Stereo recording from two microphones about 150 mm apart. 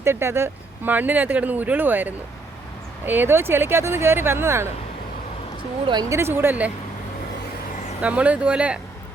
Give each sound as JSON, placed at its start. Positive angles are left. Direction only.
{"t": 0.0, "sound": "speech", "side_deg": -15}
{"t": 5.9, "sound": "speech", "side_deg": -25}
{"t": 6.3, "sound": "speech", "side_deg": -15}
{"t": 8.0, "sound": "speech", "side_deg": -10}